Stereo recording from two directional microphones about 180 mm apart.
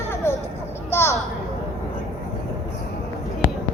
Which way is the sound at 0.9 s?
15° left (ahead or behind).